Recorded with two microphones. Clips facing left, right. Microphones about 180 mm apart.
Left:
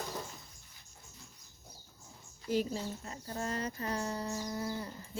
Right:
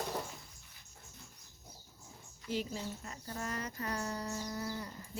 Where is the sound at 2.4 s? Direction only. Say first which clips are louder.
Left 5 dB; 40° left (ahead or behind); by 4.9 s 25° left (ahead or behind).